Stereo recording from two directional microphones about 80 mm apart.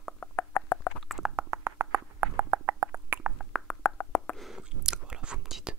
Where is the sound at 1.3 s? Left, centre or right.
Right.